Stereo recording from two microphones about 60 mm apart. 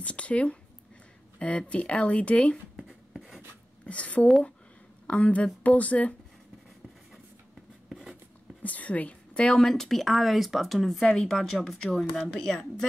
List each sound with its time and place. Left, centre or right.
0.0 s speech: left
1.6 s speech: centre
2.7 s writing: centre
3.8 s speech: left
7.9 s writing: centre
8.6 s a woman's voice: left; by 12.8 s centre